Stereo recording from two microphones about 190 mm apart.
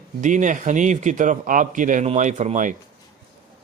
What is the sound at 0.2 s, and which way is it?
A man's voice, 40° right (ahead or behind).